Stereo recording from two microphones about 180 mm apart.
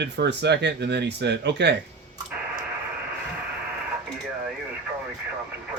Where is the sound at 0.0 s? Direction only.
70° right (ahead or behind).